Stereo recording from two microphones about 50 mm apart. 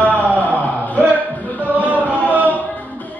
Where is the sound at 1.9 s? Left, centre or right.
Right.